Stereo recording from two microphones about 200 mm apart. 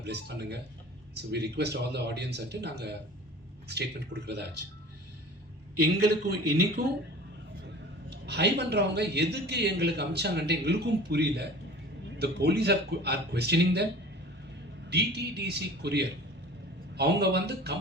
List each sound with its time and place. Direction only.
0.0 s a man's voice: 55° right (ahead or behind)
6.0 s a man's voice: 55° right (ahead or behind)
8.1 s a man's voice: 55° right (ahead or behind)
14.8 s a man's voice: 55° right (ahead or behind)